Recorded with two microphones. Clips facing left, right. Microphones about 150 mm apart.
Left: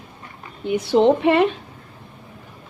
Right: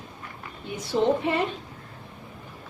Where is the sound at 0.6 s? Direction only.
70° left (ahead or behind).